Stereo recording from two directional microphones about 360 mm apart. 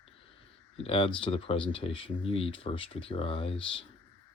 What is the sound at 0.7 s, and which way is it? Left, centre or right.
Speech, centre.